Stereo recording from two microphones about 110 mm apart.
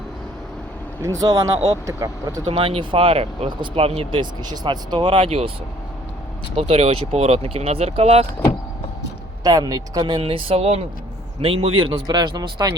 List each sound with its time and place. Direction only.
1.0 s speech: 30° right (ahead or behind)
2.5 s speech: 60° right (ahead or behind)
6.6 s speech: 65° right (ahead or behind)
9.4 s speech: 35° right (ahead or behind)
10.0 s speech: 55° right (ahead or behind); by 10.8 s 70° right (ahead or behind)
11.4 s a man's voice: 55° right (ahead or behind); by 12.7 s 35° right (ahead or behind)